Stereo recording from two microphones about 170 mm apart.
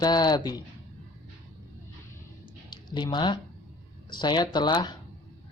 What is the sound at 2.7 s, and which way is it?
Speech, 25° left (ahead or behind).